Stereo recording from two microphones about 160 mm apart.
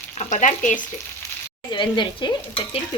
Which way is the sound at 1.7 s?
30° left (ahead or behind).